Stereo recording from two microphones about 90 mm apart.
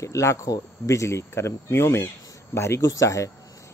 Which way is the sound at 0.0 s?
35° left (ahead or behind).